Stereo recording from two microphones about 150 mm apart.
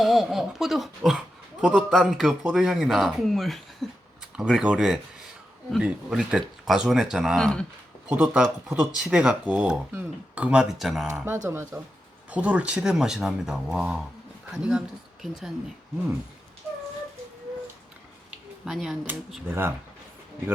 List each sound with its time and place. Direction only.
0.0 s a man's voice: centre (ahead or behind)
8.1 s speech: 10° right (ahead or behind)
11.4 s a man's voice: 15° right (ahead or behind)
18.6 s a man's voice: centre (ahead or behind)
19.5 s speech: 15° right (ahead or behind)